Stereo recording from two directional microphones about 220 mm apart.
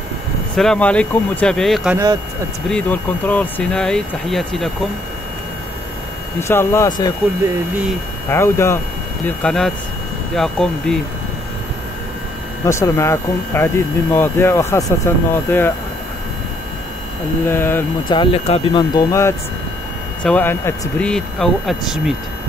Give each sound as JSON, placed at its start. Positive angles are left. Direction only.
{"t": 0.6, "sound": "speech", "side_deg": 5}
{"t": 6.4, "sound": "speech", "side_deg": 10}
{"t": 7.4, "sound": "speech", "side_deg": -5}
{"t": 8.3, "sound": "speech", "side_deg": 10}
{"t": 12.6, "sound": "speech", "side_deg": 15}
{"t": 17.5, "sound": "speech", "side_deg": 10}
{"t": 18.0, "sound": "speech", "side_deg": 20}